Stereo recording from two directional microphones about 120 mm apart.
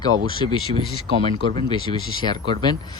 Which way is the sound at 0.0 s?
40° left (ahead or behind).